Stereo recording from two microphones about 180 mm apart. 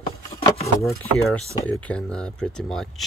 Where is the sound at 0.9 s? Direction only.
Centre (ahead or behind).